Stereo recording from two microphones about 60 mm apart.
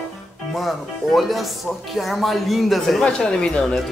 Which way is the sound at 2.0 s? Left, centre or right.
Centre.